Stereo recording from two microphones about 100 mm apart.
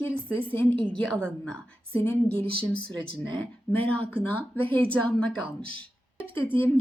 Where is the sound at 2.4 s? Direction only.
65° right (ahead or behind).